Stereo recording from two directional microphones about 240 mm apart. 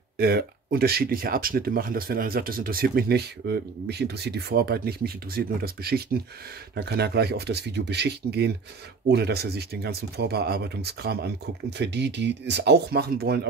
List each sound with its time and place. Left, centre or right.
0.2 s speech: right